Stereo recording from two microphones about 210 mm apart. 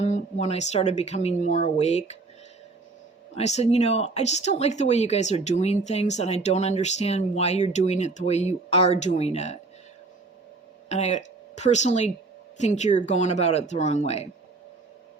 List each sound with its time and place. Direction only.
0.0 s speech: 30° left (ahead or behind)
3.3 s speech: 30° left (ahead or behind)
10.8 s speech: 30° left (ahead or behind)